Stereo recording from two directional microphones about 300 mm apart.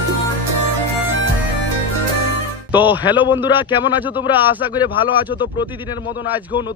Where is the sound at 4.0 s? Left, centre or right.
Centre.